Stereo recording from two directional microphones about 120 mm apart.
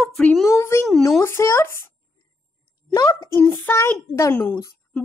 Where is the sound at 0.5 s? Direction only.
25° left (ahead or behind).